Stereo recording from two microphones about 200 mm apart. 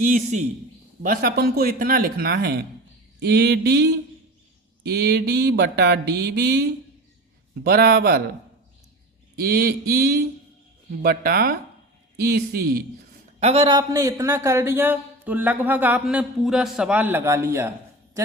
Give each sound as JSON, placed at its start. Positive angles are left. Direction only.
{"t": 0.0, "sound": "a man's voice", "side_deg": -40}
{"t": 3.2, "sound": "a sound", "side_deg": -55}
{"t": 7.5, "sound": "speech", "side_deg": -50}
{"t": 9.4, "sound": "speech", "side_deg": -50}
{"t": 13.4, "sound": "a man's voice", "side_deg": -30}